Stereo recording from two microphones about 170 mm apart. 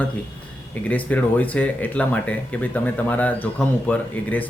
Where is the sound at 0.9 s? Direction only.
10° left (ahead or behind).